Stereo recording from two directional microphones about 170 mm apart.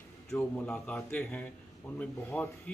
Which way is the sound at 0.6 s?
5° left (ahead or behind).